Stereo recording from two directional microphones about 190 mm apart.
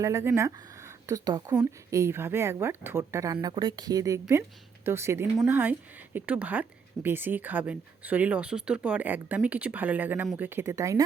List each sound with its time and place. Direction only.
0.0 s a woman's voice: 15° right (ahead or behind)